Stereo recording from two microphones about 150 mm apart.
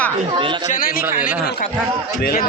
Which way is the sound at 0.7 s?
70° left (ahead or behind).